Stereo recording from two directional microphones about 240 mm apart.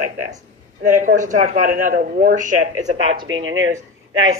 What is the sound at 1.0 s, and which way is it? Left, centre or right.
Speech, right.